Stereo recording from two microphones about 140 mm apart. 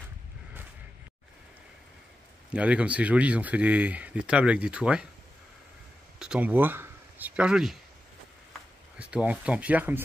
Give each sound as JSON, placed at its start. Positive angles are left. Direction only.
{"t": 2.5, "sound": "speech", "side_deg": -10}
{"t": 6.1, "sound": "speech", "side_deg": -5}
{"t": 8.9, "sound": "speech", "side_deg": -10}